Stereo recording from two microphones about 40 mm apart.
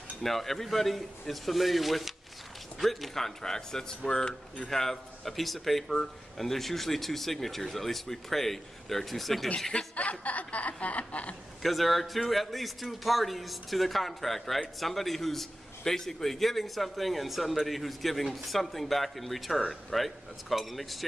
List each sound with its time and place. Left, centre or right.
0.2 s speech: centre; by 4.6 s left
4.6 s speech: centre
9.9 s a woman's voice: left
11.6 s speech: centre